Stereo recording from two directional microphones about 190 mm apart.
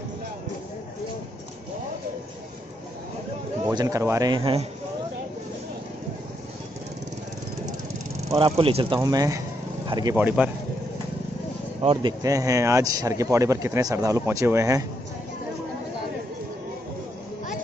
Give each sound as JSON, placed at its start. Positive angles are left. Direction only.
{"t": 3.7, "sound": "speech", "side_deg": -15}
{"t": 8.4, "sound": "speech", "side_deg": -30}
{"t": 10.1, "sound": "speech", "side_deg": -5}
{"t": 11.8, "sound": "speech", "side_deg": -25}